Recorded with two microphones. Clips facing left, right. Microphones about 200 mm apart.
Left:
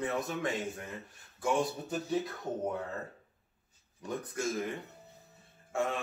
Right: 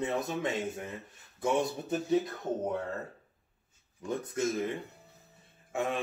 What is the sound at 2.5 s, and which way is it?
Speech, 20° right (ahead or behind).